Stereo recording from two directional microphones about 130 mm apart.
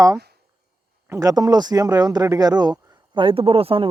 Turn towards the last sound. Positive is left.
turn(degrees=-45)  # may be behind; listen again after turning